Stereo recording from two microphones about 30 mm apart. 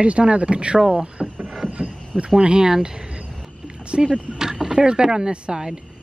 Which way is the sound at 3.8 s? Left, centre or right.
Right.